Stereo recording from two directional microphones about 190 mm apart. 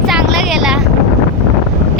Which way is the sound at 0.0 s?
Centre (ahead or behind).